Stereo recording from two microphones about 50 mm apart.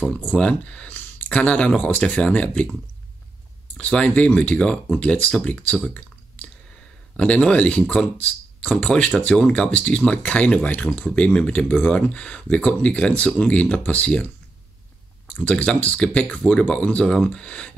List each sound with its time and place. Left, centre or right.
0.4 s speech: left
3.7 s speech: left
5.9 s clicking: left
7.2 s speech: centre; by 11.1 s left
11.1 s speech: left
15.4 s speech: left